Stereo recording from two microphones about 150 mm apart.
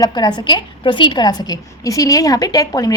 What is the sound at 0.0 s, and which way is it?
A woman's voice, 30° left (ahead or behind).